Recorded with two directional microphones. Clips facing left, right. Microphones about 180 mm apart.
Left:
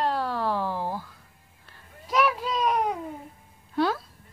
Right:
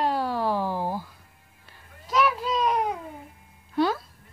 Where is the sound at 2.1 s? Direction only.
5° left (ahead or behind).